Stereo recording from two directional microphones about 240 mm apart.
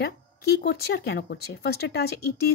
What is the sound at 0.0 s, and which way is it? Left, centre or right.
Speech, left.